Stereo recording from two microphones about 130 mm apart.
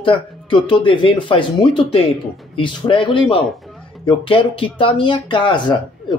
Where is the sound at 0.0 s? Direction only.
40° left (ahead or behind).